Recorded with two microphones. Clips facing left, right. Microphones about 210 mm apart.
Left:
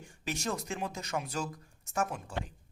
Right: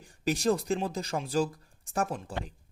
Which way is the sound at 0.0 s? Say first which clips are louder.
Right 9 dB; 35° right (ahead or behind).